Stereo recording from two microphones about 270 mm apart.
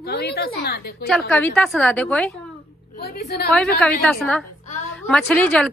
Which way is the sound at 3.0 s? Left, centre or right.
Left.